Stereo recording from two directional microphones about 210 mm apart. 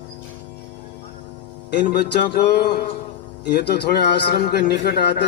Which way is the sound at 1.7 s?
55° left (ahead or behind).